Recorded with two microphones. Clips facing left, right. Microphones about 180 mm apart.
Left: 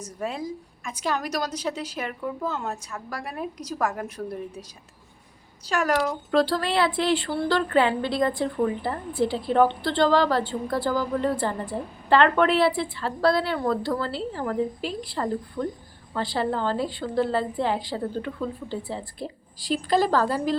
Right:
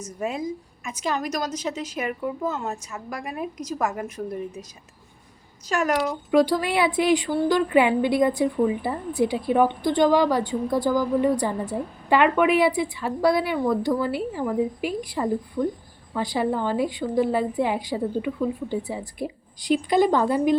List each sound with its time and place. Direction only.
0.2 s a woman's voice: 5° right (ahead or behind)
5.8 s a woman's voice: 5° right (ahead or behind)